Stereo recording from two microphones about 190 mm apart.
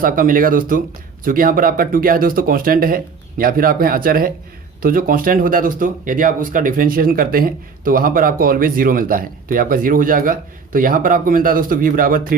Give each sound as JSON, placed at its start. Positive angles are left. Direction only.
{"t": 0.0, "sound": "speech", "side_deg": -45}